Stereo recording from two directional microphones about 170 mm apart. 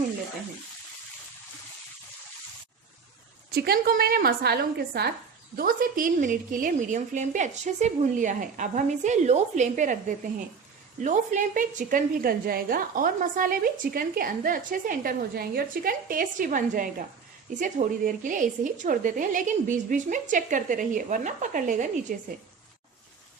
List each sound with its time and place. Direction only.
3.5 s a woman's voice: 65° right (ahead or behind)
5.5 s a woman's voice: 60° right (ahead or behind)